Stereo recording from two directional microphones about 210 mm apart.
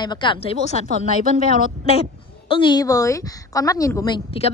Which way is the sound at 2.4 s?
25° left (ahead or behind).